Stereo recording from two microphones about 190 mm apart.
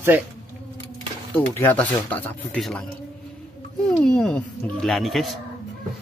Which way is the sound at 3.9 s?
Centre (ahead or behind).